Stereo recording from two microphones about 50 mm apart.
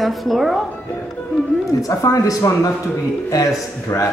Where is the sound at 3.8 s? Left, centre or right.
Left.